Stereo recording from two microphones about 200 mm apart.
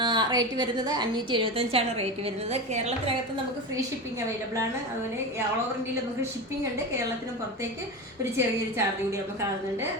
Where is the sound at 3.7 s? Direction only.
15° right (ahead or behind).